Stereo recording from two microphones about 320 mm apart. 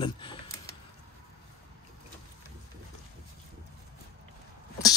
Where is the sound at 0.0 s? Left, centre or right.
Centre.